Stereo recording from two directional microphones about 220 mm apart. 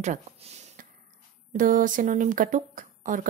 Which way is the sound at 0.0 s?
30° right (ahead or behind).